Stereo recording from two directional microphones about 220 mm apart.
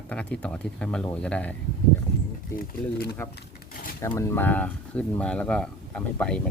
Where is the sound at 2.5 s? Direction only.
45° left (ahead or behind).